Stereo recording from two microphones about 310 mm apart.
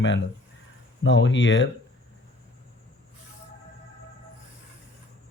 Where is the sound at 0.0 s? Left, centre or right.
Left.